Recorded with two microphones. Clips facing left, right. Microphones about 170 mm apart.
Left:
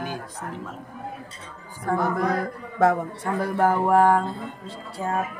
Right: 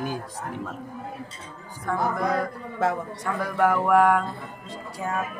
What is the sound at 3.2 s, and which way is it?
Speech, 30° left (ahead or behind).